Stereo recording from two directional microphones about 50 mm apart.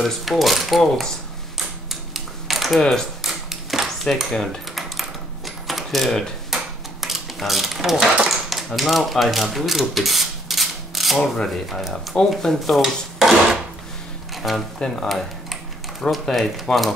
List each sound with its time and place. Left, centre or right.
0.0 s speech: centre
1.9 s typing: centre
2.8 s speech: centre
3.2 s typewriter: centre
4.0 s a sound: centre
6.5 s dishes: centre
8.5 s typewriter: centre
11.1 s speech: centre
14.3 s music: centre
15.0 s speech: centre